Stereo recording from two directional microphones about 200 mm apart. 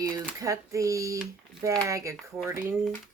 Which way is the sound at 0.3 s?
15° right (ahead or behind).